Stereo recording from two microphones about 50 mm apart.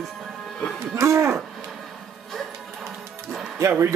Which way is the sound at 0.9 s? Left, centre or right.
Right.